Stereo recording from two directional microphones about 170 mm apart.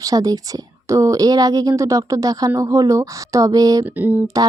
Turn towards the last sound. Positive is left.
turn(degrees=-20)  # may be behind; listen again after turning